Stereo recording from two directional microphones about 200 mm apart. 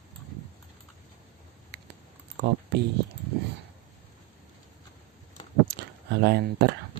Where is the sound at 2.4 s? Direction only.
60° right (ahead or behind).